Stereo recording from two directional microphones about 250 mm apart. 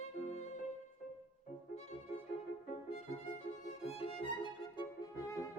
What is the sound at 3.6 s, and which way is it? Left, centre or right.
Violin, left.